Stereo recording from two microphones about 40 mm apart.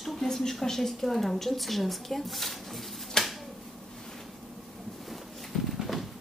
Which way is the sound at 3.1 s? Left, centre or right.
Centre.